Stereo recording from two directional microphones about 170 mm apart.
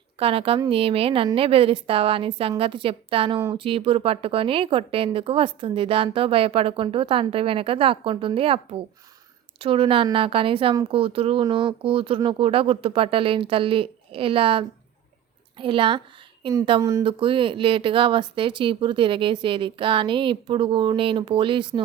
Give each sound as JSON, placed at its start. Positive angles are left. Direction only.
{"t": 0.2, "sound": "speech", "side_deg": -35}